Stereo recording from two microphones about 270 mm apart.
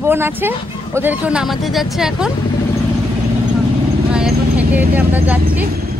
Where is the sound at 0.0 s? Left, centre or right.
Centre.